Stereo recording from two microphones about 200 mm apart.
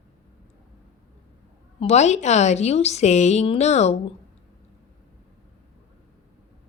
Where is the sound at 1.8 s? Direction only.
35° left (ahead or behind).